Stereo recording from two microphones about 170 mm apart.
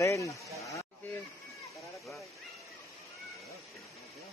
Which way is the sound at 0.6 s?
20° left (ahead or behind).